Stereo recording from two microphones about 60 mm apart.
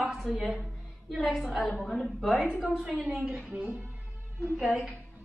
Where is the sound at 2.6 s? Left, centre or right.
Centre.